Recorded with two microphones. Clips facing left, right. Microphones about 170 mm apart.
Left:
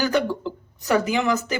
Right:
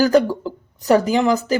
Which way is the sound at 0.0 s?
40° right (ahead or behind).